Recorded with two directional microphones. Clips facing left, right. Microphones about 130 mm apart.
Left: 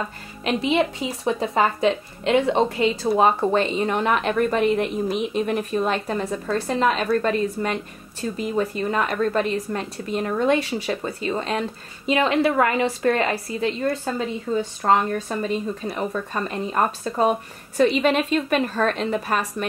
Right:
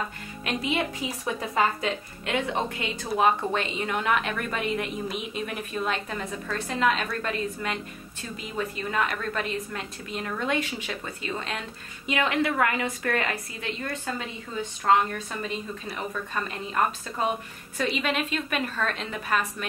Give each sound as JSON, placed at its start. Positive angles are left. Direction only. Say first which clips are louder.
{"t": 0.4, "sound": "a woman's voice", "louder": "left 7 dB", "side_deg": 25}